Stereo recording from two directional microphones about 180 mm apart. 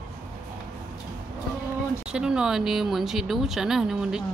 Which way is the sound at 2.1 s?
5° right (ahead or behind).